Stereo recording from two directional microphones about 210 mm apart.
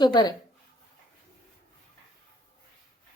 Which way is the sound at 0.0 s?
20° left (ahead or behind).